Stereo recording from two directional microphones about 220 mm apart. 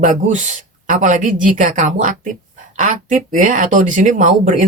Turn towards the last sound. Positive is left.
turn(degrees=-35)  # may be behind; listen again after turning